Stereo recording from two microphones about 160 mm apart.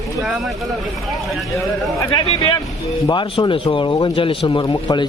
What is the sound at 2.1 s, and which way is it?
Speech, 25° left (ahead or behind).